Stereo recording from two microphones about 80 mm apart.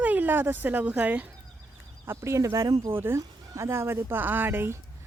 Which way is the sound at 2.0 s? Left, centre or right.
Right.